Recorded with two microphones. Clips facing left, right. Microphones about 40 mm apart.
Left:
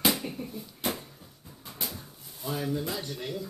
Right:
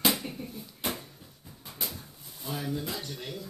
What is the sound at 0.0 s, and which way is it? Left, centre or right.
Bouncing, centre.